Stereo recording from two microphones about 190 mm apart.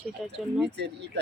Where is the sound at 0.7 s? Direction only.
65° right (ahead or behind).